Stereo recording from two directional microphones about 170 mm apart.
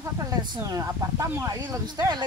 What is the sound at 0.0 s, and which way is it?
Speech, 20° right (ahead or behind).